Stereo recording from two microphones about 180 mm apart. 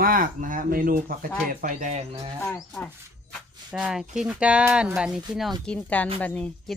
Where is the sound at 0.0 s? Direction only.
50° right (ahead or behind).